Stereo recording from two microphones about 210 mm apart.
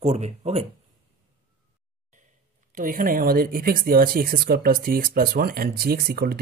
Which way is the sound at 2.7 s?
40° right (ahead or behind).